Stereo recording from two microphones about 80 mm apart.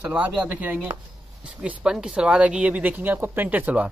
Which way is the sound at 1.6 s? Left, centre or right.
Centre.